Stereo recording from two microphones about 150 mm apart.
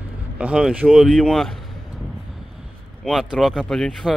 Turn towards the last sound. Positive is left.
turn(degrees=5)  # may be behind; listen again after turning